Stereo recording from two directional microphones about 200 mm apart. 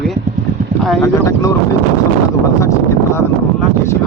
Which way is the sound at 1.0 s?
15° left (ahead or behind).